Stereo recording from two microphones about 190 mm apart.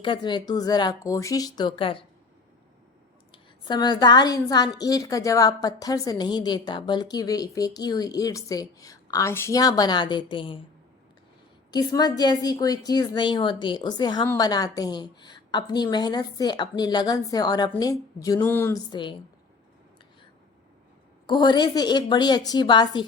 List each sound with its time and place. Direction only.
0.0 s a woman's voice: 25° left (ahead or behind)
3.3 s a woman's voice: 25° left (ahead or behind)
11.7 s a woman's voice: 20° left (ahead or behind)
18.9 s a woman's voice: 25° left (ahead or behind)
21.2 s a woman's voice: 25° left (ahead or behind)